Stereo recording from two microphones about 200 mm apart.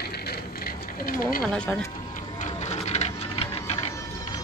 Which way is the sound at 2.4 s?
35° left (ahead or behind).